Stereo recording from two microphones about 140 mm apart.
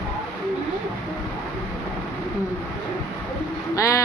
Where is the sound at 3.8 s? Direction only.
20° left (ahead or behind).